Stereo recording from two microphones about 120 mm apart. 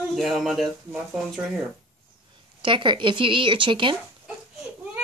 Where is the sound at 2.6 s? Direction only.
45° right (ahead or behind).